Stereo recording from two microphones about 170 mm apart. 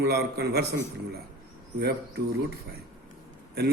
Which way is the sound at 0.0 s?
70° right (ahead or behind).